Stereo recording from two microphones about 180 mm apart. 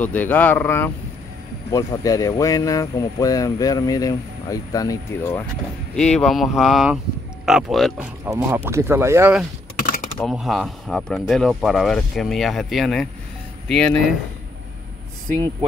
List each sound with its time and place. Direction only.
0.0 s speech: 10° left (ahead or behind)
5.9 s speech: 5° left (ahead or behind)
8.3 s speech: 10° right (ahead or behind); by 13.9 s 5° left (ahead or behind)